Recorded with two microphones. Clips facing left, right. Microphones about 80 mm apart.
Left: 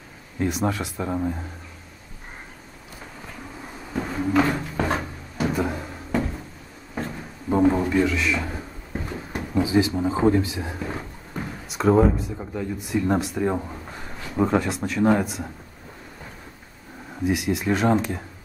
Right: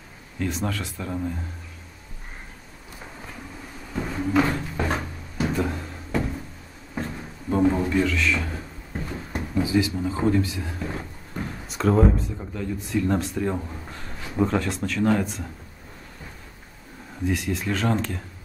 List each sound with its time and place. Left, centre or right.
0.4 s speech: centre
3.9 s a sound: centre
7.0 s a sound: centre
9.3 s speech: left
11.6 s speech: centre; by 15.2 s left
17.2 s speech: centre